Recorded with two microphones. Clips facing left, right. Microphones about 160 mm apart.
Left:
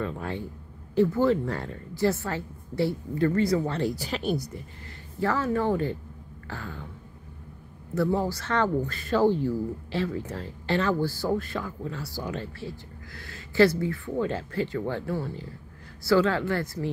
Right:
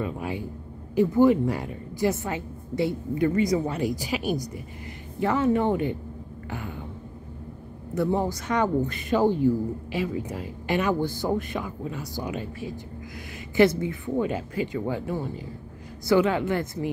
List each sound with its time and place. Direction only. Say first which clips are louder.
0.0 s a woman's voice: right 2 dB; 10° right (ahead or behind)
7.9 s a woman's voice: right 1 dB; 20° right (ahead or behind)